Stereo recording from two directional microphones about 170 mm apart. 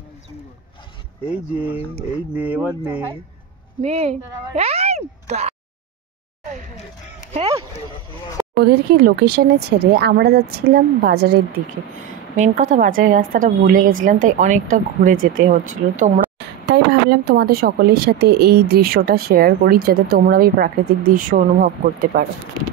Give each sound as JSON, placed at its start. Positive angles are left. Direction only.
{"t": 2.3, "sound": "speech", "side_deg": -10}
{"t": 3.8, "sound": "speech", "side_deg": -40}
{"t": 8.5, "sound": "speech", "side_deg": -70}
{"t": 12.4, "sound": "a woman's voice", "side_deg": -50}
{"t": 16.3, "sound": "speech", "side_deg": -90}